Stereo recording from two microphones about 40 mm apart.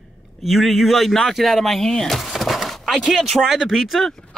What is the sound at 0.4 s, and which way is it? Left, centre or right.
Speech, centre.